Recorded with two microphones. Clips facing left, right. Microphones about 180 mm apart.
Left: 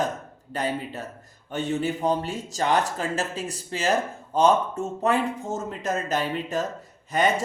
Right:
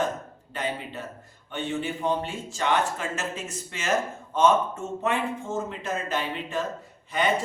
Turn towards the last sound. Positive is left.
turn(degrees=45)  # may be behind; listen again after turning